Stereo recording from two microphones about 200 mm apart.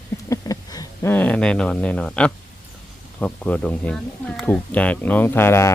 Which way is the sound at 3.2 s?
5° left (ahead or behind).